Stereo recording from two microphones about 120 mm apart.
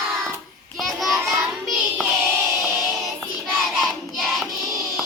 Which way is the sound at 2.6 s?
25° right (ahead or behind).